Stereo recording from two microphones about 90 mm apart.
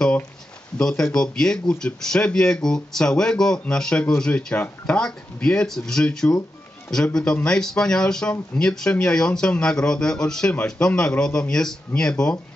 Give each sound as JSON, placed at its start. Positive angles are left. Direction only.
{"t": 0.7, "sound": "speech", "side_deg": 5}